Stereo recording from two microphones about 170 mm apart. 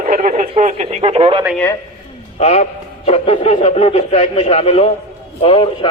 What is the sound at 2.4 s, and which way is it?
A man's voice, 40° left (ahead or behind).